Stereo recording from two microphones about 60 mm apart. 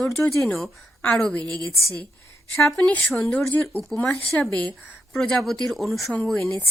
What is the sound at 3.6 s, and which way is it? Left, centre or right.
Speech, left.